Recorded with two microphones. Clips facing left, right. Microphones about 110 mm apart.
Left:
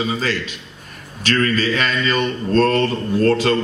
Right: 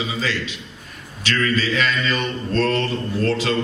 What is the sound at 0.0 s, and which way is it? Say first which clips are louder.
A man's voice: left 3 dB; 45° left (ahead or behind).